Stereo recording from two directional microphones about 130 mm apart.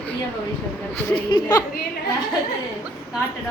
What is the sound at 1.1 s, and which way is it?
Speech, 35° left (ahead or behind).